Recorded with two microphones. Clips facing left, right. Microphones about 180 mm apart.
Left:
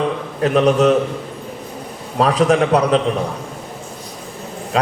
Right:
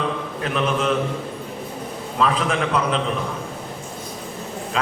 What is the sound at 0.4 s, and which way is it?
Speech, 40° left (ahead or behind).